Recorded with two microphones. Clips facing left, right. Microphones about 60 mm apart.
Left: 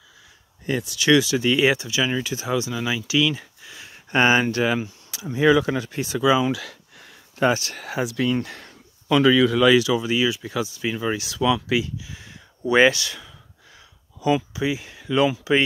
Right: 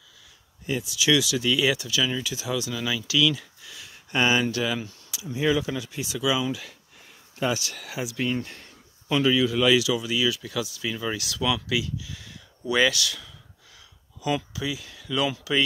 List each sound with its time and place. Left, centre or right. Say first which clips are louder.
0.7 s speech: left 4 dB; left
6.5 s a sound: left 5 dB; left
7.4 s speech: left 6 dB; left
9.8 s speech: left 4 dB; left